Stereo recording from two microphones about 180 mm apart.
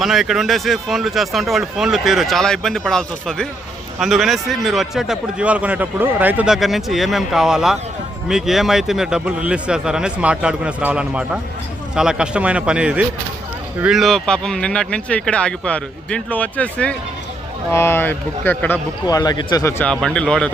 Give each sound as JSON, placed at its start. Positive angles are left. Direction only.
{"t": 0.0, "sound": "a man's voice", "side_deg": 0}
{"t": 19.0, "sound": "a man's voice", "side_deg": 20}
{"t": 19.8, "sound": "a man's voice", "side_deg": 5}